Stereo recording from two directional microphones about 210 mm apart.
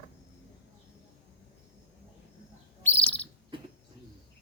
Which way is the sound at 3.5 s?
25° right (ahead or behind).